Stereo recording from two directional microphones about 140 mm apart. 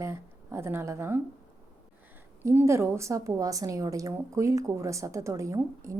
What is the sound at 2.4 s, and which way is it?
A woman's voice, 20° right (ahead or behind).